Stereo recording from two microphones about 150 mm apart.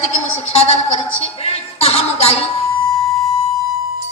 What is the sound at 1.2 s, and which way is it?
Music, 40° left (ahead or behind).